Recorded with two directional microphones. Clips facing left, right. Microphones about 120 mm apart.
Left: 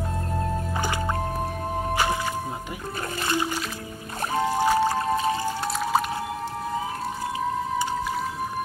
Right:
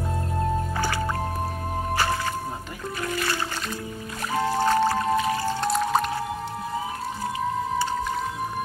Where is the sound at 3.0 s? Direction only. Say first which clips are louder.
Right 1 dB; 30° left (ahead or behind).